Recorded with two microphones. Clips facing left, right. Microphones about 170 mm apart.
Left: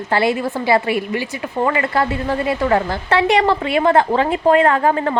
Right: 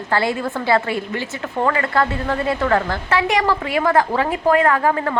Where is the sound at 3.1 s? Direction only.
30° left (ahead or behind).